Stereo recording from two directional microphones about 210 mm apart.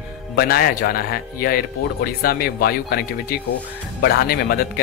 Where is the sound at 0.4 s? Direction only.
45° left (ahead or behind).